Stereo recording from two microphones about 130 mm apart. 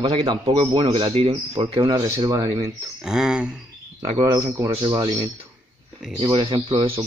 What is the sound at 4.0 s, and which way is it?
Speech, 40° right (ahead or behind).